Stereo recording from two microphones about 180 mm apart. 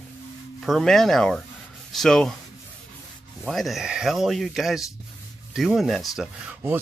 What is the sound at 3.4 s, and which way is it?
Speech, centre (ahead or behind).